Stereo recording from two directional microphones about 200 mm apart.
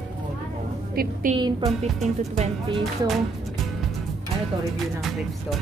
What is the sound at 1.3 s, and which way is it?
Speech, 40° right (ahead or behind).